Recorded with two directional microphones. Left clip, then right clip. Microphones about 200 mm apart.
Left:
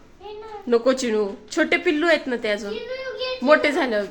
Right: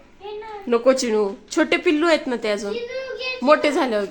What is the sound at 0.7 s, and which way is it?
Speech, 10° right (ahead or behind).